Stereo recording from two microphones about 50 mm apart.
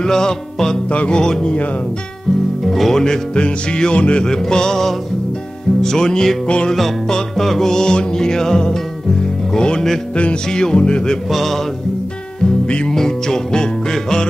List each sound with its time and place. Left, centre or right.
0.0 s music: centre
0.8 s music: left
2.6 s music: centre; by 6.7 s left
6.7 s music: centre
11.2 s music: centre
12.6 s music: left